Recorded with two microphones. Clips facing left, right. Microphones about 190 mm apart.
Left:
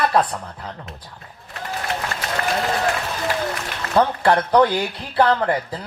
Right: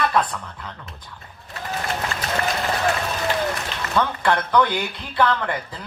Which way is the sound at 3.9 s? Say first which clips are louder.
Left 4 dB; 35° left (ahead or behind).